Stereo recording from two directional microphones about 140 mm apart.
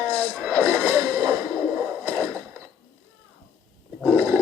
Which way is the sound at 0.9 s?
20° right (ahead or behind).